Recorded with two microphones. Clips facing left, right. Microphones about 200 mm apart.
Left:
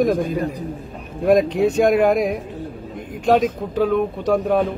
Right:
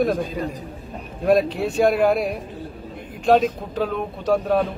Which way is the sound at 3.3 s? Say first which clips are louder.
Even; 10° left (ahead or behind).